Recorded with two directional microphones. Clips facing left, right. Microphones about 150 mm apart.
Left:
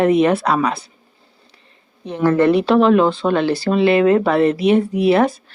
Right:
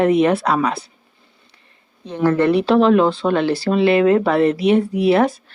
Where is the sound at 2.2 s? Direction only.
45° left (ahead or behind).